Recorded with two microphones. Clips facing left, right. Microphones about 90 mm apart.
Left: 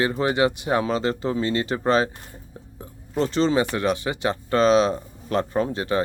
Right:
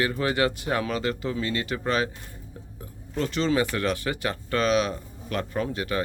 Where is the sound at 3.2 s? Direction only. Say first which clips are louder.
Left 4 dB; 30° left (ahead or behind).